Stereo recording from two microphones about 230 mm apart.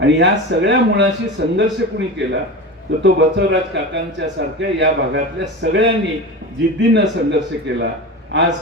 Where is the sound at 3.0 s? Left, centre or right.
Right.